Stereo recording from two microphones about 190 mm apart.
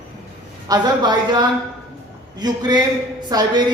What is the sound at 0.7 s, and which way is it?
A man's voice, 20° right (ahead or behind).